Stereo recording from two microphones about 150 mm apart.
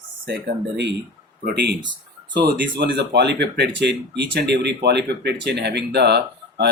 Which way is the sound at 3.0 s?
90° right.